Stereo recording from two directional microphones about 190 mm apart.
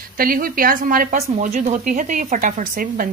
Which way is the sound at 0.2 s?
50° right (ahead or behind).